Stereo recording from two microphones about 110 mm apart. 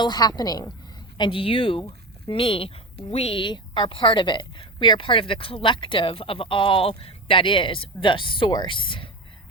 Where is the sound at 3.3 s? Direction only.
45° left (ahead or behind).